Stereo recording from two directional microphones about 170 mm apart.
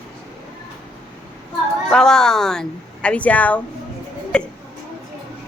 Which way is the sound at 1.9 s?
5° left (ahead or behind).